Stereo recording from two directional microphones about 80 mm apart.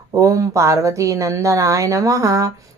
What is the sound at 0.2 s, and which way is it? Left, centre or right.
Speech, right.